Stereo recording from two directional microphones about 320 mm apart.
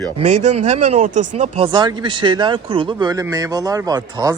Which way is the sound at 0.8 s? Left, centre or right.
Right.